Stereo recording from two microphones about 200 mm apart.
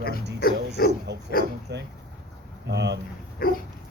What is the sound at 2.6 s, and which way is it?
Speech, 60° right (ahead or behind).